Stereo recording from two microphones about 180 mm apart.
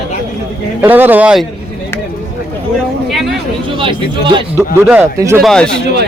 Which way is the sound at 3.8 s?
25° right (ahead or behind).